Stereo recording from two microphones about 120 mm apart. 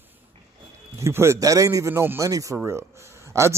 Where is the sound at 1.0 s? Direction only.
20° right (ahead or behind).